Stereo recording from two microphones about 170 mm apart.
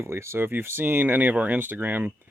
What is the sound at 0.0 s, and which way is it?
Speech, 15° right (ahead or behind).